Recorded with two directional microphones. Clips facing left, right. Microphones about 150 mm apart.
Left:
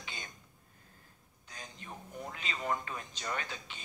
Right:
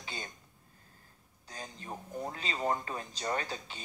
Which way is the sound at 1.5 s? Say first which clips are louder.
Right 5 dB; 35° right (ahead or behind).